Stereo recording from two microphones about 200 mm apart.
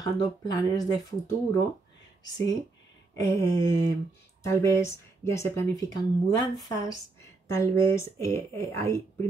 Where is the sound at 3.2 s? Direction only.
15° left (ahead or behind).